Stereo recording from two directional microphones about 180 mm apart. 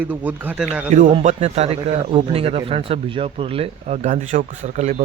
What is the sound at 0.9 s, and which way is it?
A man's voice, 45° right (ahead or behind).